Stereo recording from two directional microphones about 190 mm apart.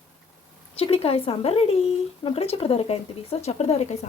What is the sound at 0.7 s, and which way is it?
Speech, 30° left (ahead or behind).